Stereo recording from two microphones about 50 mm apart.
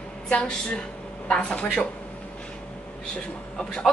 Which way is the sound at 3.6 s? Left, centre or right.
Centre.